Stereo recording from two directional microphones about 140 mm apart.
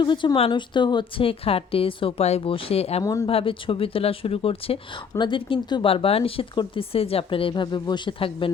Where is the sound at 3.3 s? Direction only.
40° left (ahead or behind).